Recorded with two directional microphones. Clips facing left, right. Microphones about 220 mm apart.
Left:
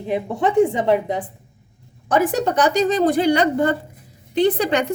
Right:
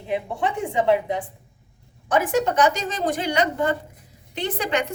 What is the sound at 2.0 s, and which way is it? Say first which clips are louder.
Speech: left 2 dB; 35° left (ahead or behind).